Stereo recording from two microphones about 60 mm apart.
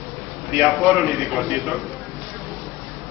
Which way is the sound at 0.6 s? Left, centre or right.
Centre.